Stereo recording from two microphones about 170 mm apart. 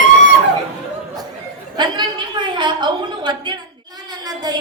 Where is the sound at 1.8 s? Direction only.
25° right (ahead or behind).